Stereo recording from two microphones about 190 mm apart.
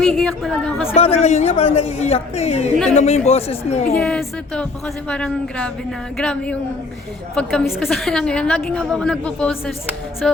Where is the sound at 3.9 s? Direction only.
5° left (ahead or behind).